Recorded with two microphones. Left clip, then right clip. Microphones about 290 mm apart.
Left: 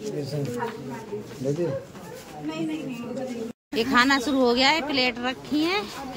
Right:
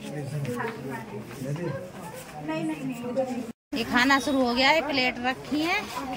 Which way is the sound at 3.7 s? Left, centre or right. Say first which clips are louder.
Left 2 dB; centre.